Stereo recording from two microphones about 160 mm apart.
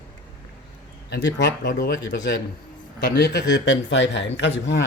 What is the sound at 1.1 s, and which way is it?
Speech, 90° left.